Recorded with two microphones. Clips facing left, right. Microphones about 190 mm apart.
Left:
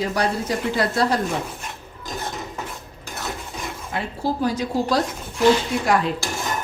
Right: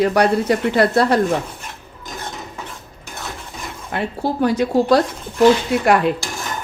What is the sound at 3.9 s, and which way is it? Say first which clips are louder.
Speech: right 4 dB; 65° right (ahead or behind).